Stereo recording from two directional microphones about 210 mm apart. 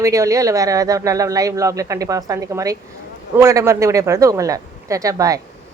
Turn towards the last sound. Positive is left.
turn(degrees=-15)  # may be behind; listen again after turning